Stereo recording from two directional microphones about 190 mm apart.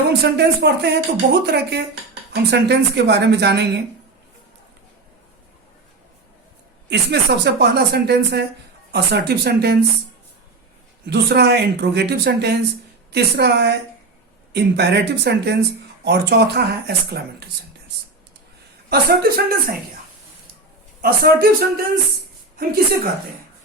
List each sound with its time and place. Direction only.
0.1 s speech: 60° right (ahead or behind)
6.9 s speech: 60° right (ahead or behind)
11.0 s speech: 60° right (ahead or behind)
18.9 s speech: 50° right (ahead or behind)
21.0 s speech: 50° right (ahead or behind)